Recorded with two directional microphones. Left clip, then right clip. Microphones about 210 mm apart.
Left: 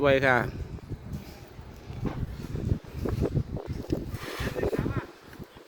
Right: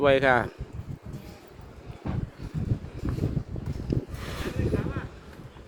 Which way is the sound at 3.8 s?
25° left (ahead or behind).